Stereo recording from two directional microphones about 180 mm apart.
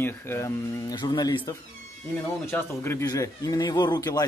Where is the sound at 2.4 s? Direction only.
15° left (ahead or behind).